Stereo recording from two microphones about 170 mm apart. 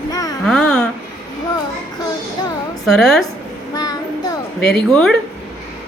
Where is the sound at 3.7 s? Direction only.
25° left (ahead or behind).